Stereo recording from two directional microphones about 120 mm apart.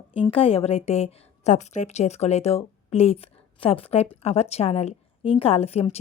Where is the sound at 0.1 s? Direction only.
50° left (ahead or behind).